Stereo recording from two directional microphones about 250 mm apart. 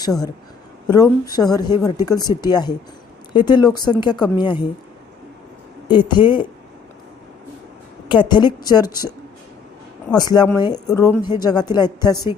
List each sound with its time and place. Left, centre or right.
0.0 s a man's voice: centre
5.9 s speech: centre
8.0 s speech: centre